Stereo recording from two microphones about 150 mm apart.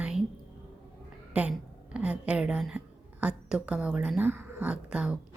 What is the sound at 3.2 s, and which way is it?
A woman's voice, 5° right (ahead or behind).